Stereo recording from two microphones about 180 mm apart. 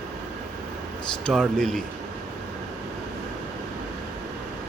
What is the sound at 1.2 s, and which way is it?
Speech, centre (ahead or behind).